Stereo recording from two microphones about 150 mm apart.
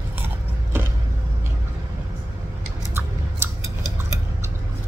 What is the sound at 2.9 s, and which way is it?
Scissors, 15° right (ahead or behind).